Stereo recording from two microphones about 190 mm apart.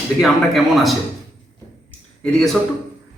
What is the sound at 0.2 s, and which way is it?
Speech, centre (ahead or behind).